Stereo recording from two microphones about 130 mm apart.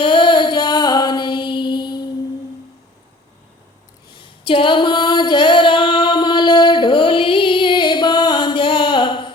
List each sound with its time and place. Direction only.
0.0 s music: 40° left (ahead or behind)
4.1 s female singing: 40° left (ahead or behind)